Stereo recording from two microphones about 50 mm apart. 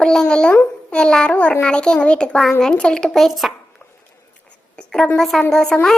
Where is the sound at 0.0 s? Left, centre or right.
Centre.